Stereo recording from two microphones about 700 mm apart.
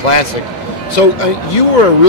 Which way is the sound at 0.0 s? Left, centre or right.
Left.